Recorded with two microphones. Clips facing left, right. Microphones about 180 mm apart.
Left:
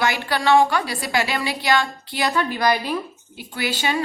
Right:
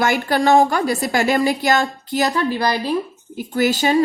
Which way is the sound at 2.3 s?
30° right (ahead or behind).